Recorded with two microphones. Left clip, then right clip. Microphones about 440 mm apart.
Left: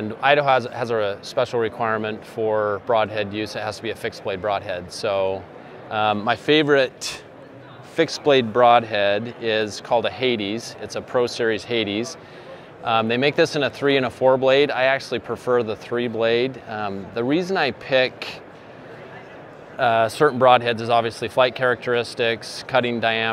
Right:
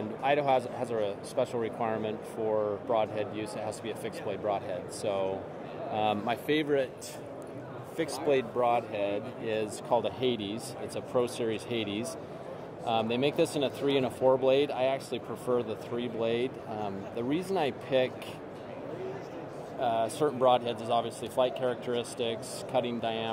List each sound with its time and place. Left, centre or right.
0.2 s speech: left
6.5 s speech: left
7.9 s speech: left
9.4 s speech: left
19.8 s speech: left